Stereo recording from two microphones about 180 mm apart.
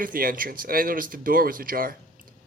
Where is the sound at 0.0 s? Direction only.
50° right (ahead or behind).